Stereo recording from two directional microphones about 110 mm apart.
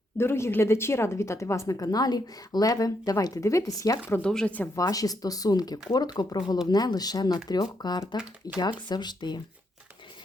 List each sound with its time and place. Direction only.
0.2 s a woman's voice: 25° left (ahead or behind)
4.2 s speech: 5° left (ahead or behind)
4.7 s speech: 30° left (ahead or behind)
8.2 s speech: 5° right (ahead or behind)
8.9 s speech: 40° left (ahead or behind)